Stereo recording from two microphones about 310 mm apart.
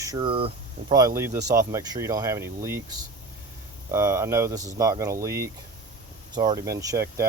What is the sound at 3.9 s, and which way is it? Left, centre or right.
Speech, centre.